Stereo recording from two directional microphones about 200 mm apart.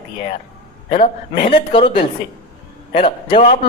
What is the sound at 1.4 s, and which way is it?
A man's voice, 25° left (ahead or behind).